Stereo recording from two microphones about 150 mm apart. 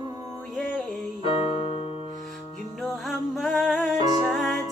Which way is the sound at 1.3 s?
40° left (ahead or behind).